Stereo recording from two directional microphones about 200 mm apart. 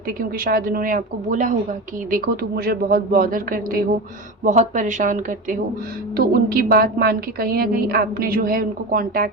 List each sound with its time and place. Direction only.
0.2 s a woman's voice: 45° right (ahead or behind)